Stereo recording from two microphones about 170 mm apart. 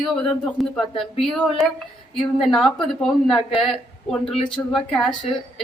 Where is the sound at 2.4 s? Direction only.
Centre (ahead or behind).